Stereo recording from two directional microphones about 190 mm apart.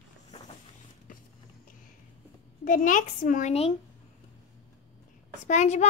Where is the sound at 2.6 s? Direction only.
45° left (ahead or behind).